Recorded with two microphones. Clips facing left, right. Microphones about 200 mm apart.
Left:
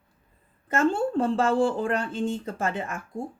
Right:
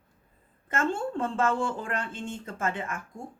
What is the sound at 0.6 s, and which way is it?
Speech, 35° left (ahead or behind).